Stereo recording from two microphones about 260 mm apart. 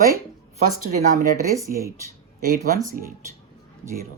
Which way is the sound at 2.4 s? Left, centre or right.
Right.